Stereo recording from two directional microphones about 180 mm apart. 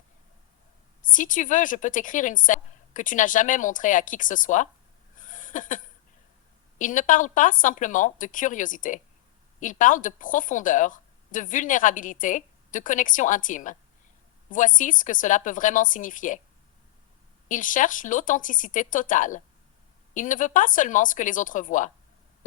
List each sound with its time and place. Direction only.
1.0 s speech: 45° left (ahead or behind)
5.1 s a sound: 45° left (ahead or behind)
6.7 s speech: 45° left (ahead or behind)
17.5 s speech: 45° left (ahead or behind)